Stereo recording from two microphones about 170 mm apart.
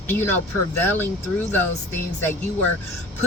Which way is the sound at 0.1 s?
15° left (ahead or behind).